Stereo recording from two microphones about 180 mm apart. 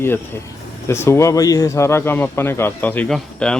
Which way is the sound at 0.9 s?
15° left (ahead or behind).